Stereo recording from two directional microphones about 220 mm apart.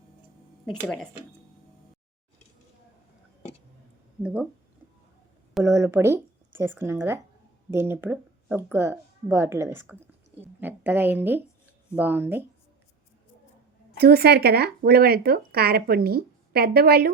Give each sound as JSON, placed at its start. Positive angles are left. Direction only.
{"t": 4.2, "sound": "speech", "side_deg": -5}
{"t": 5.6, "sound": "speech", "side_deg": -10}
{"t": 14.0, "sound": "speech", "side_deg": -45}